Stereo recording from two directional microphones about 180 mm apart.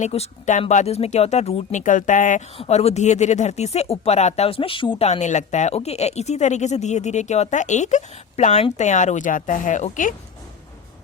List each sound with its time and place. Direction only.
0.0 s speech: 40° left (ahead or behind)